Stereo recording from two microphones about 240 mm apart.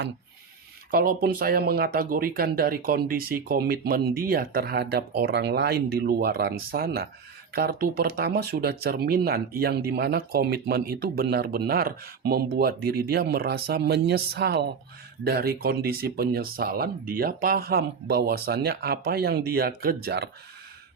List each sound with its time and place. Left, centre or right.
0.9 s speech: right